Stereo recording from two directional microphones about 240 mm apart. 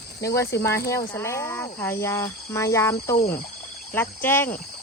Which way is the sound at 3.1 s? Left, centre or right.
Left.